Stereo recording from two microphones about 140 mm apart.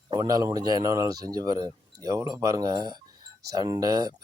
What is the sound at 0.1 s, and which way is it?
Speech, 25° right (ahead or behind).